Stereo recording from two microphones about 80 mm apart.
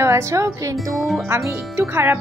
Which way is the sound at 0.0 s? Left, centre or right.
Right.